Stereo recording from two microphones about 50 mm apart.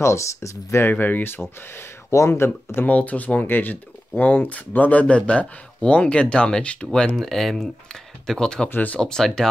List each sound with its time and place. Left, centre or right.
0.0 s speech: left
0.8 s speech: left
2.0 s speech: left
2.8 s speech: left
3.4 s speech: left; by 7.1 s centre
7.2 s speech: centre